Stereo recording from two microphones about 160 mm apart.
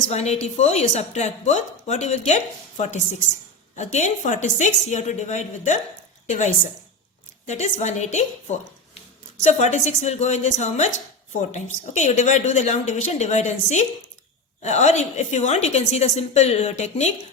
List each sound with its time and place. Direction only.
0.0 s a woman's voice: 45° left (ahead or behind)